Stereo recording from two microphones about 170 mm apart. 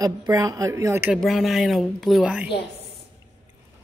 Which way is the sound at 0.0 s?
20° right (ahead or behind).